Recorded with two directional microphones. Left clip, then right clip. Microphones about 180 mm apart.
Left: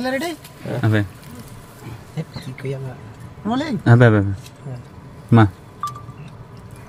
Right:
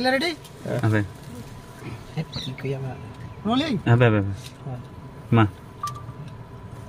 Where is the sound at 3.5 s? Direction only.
15° right (ahead or behind).